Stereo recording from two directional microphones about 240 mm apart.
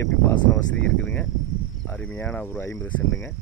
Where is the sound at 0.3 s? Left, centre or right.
Centre.